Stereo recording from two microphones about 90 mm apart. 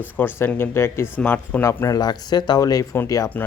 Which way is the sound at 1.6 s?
35° left (ahead or behind).